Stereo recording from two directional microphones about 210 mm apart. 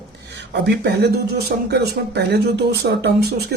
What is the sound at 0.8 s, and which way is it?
Speech, 50° right (ahead or behind).